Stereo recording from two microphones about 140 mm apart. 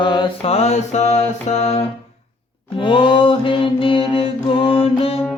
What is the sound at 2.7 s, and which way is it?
Mantra, 35° left (ahead or behind).